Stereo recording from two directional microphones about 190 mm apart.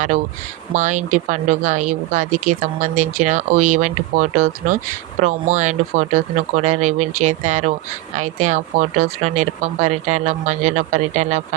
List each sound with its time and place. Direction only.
0.7 s speech: 40° right (ahead or behind)